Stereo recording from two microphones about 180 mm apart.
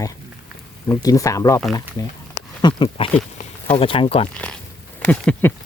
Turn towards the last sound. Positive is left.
turn(degrees=5)  # may be behind; listen again after turning